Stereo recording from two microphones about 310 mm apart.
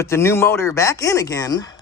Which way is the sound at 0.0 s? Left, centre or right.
Centre.